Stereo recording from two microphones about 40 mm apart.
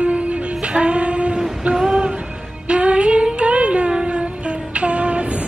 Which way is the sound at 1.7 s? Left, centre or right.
Centre.